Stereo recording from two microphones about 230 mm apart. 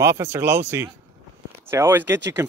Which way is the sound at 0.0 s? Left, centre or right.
Centre.